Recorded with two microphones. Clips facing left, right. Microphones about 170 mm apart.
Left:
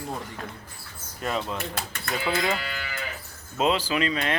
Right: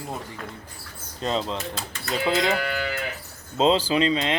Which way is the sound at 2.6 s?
60° right (ahead or behind).